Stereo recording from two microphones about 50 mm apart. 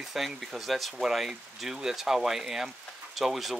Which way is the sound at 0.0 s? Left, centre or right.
Centre.